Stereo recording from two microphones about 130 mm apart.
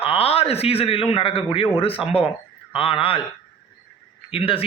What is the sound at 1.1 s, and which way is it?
Speech, 45° left (ahead or behind).